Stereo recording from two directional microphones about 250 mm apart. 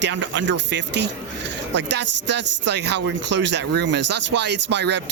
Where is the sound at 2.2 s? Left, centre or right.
Right.